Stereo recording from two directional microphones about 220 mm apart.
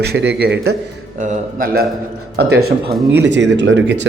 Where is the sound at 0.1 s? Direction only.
50° right (ahead or behind).